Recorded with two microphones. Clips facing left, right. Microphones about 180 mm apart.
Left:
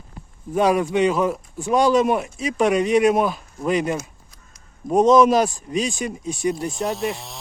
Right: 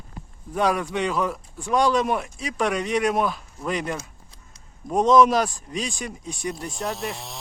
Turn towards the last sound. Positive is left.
turn(degrees=0)  # may be behind; listen again after turning